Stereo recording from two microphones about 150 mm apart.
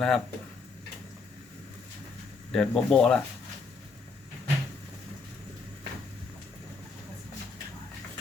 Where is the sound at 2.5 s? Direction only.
5° left (ahead or behind).